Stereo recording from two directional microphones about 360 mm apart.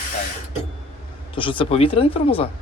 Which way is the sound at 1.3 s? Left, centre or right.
Centre.